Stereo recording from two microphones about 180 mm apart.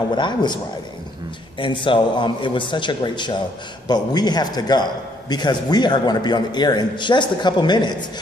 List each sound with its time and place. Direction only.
0.1 s a man's voice: 25° left (ahead or behind)
1.6 s a man's voice: 25° left (ahead or behind)